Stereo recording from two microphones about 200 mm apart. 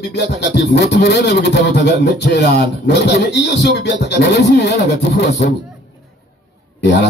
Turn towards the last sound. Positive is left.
turn(degrees=60)  # may be behind; listen again after turning